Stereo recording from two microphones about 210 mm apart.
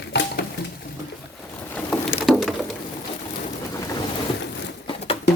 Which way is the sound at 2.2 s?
Centre (ahead or behind).